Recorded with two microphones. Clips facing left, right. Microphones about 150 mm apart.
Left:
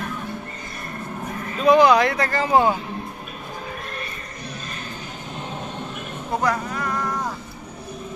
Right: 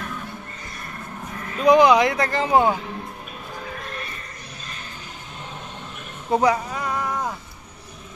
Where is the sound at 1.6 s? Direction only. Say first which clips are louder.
Even; 15° right (ahead or behind).